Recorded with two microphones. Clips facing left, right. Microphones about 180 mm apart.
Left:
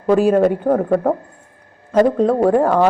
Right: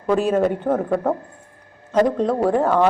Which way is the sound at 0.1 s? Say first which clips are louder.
Left 5 dB; 10° left (ahead or behind).